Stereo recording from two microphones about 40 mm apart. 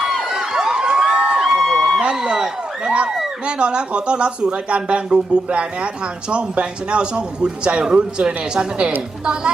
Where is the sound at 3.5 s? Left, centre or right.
Right.